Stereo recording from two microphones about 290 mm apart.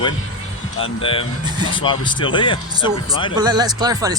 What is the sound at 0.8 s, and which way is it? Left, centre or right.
Speech, centre.